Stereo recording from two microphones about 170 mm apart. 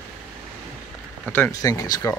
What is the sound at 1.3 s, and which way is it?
Speech, 10° left (ahead or behind).